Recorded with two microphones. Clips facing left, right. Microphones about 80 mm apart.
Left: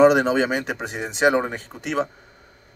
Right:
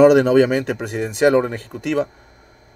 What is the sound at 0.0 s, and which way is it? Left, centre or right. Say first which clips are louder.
Speech: right 4 dB; left.